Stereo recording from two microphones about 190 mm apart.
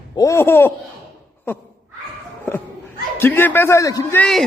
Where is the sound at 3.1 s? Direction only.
10° left (ahead or behind).